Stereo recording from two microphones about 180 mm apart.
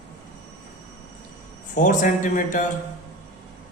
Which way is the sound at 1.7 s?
45° left (ahead or behind).